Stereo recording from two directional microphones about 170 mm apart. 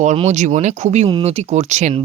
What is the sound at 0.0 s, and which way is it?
Speech, 45° right (ahead or behind).